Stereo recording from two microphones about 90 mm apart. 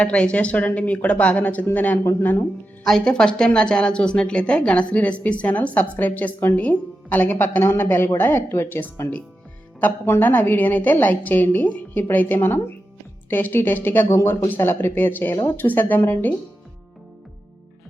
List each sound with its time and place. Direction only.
0.0 s speech: 15° left (ahead or behind)
2.8 s a woman's voice: 5° left (ahead or behind)